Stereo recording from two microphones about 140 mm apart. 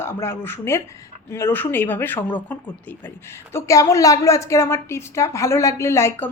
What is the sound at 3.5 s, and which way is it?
A woman's voice, 25° left (ahead or behind).